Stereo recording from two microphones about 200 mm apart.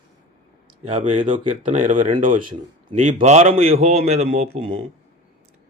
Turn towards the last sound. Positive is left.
turn(degrees=-30)  # may be behind; listen again after turning